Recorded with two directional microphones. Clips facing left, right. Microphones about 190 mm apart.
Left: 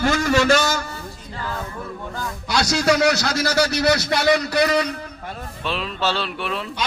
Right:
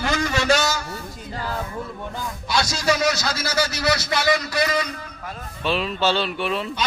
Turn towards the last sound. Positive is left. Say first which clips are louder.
# right 2 dB
turn(degrees=0)  # may be behind; listen again after turning